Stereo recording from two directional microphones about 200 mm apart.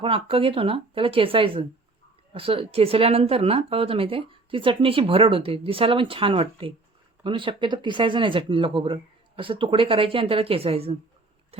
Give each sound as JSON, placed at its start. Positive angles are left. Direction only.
{"t": 0.0, "sound": "speech", "side_deg": -30}